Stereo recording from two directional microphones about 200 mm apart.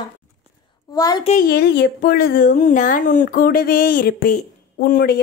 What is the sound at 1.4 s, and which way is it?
Speech, 55° left (ahead or behind).